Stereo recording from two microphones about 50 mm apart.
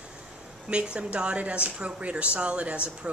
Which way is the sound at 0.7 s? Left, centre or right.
Right.